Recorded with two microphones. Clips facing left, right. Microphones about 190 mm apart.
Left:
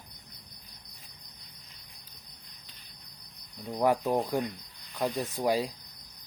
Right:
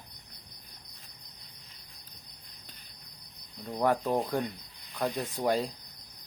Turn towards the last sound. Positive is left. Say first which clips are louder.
# left 1 dB
turn(degrees=5)  # may be behind; listen again after turning